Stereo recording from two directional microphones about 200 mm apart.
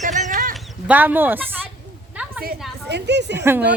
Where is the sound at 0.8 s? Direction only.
10° right (ahead or behind).